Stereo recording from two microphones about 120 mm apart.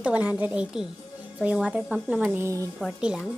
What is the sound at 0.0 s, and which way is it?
Speech, 10° right (ahead or behind).